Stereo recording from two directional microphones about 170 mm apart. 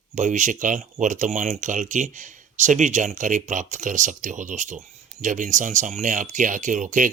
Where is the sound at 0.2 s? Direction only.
45° right (ahead or behind).